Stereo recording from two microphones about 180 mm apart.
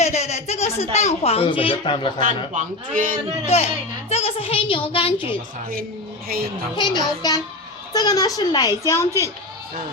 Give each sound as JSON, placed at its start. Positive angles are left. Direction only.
{"t": 0.0, "sound": "a sound", "side_deg": 40}
{"t": 0.9, "sound": "a child's voice", "side_deg": 35}
{"t": 2.5, "sound": "speech", "side_deg": -45}
{"t": 3.4, "sound": "a child's voice", "side_deg": 35}
{"t": 6.2, "sound": "speech", "side_deg": -55}
{"t": 6.7, "sound": "a child's voice", "side_deg": 25}